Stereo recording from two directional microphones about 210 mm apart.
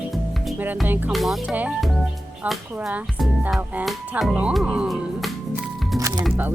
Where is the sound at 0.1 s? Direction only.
5° right (ahead or behind).